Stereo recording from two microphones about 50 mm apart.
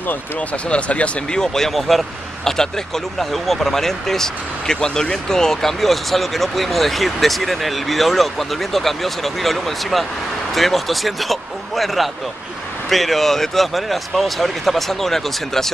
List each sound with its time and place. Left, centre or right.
0.7 s speech: left
1.4 s speech: centre